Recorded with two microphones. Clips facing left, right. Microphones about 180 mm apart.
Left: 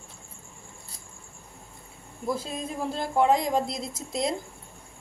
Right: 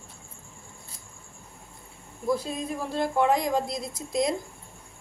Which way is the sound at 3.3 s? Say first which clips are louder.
Left 1 dB; 25° left (ahead or behind).